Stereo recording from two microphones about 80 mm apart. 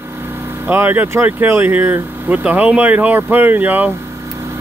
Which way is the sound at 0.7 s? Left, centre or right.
Right.